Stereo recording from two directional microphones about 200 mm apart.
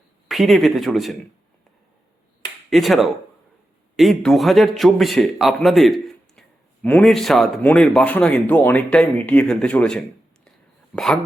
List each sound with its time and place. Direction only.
0.3 s a man's voice: centre (ahead or behind)
2.6 s a man's voice: centre (ahead or behind)